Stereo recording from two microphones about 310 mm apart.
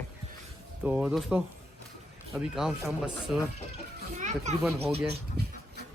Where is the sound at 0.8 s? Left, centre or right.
Centre.